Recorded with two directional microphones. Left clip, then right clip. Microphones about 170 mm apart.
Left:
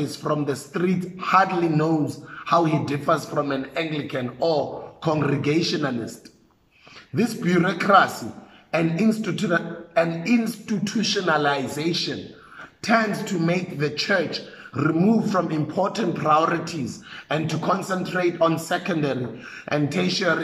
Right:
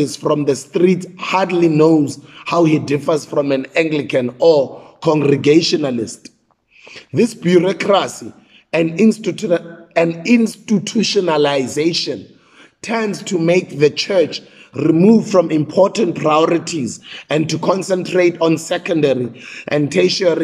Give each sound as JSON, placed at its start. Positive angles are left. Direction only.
{"t": 0.0, "sound": "a man's voice", "side_deg": -15}
{"t": 7.2, "sound": "a man's voice", "side_deg": -15}